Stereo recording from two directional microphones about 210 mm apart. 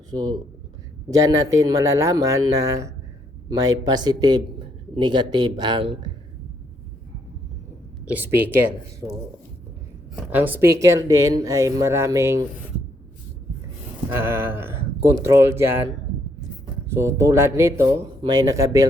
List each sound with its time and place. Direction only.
0.1 s speech: 20° right (ahead or behind)
8.0 s speech: 10° right (ahead or behind)
10.3 s speech: 10° right (ahead or behind)
14.1 s speech: 10° right (ahead or behind)
16.9 s speech: 15° right (ahead or behind)